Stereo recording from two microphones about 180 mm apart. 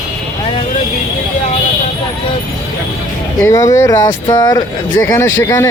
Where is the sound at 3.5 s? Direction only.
20° left (ahead or behind).